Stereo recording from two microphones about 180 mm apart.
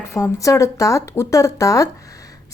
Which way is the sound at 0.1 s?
15° left (ahead or behind).